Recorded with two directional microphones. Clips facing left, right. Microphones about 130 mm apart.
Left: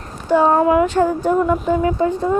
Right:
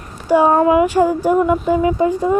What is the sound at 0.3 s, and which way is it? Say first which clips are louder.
Child singing: right 2 dB; 10° right (ahead or behind).